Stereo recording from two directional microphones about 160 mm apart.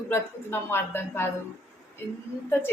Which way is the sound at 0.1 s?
15° left (ahead or behind).